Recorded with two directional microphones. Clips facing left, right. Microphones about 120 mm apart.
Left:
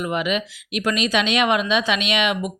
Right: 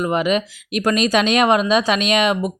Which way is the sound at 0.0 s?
35° right (ahead or behind).